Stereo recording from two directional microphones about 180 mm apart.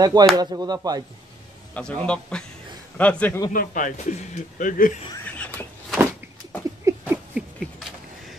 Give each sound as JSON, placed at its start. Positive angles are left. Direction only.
{"t": 0.0, "sound": "speech", "side_deg": -20}
{"t": 1.7, "sound": "a man's voice", "side_deg": 5}
{"t": 3.5, "sound": "speech", "side_deg": 45}
{"t": 5.2, "sound": "whispering", "side_deg": 10}
{"t": 6.8, "sound": "a sound", "side_deg": -15}